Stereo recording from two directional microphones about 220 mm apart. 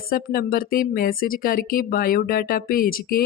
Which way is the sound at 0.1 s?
40° left (ahead or behind).